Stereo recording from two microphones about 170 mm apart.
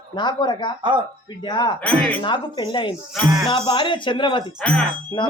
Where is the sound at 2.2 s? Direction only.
25° left (ahead or behind).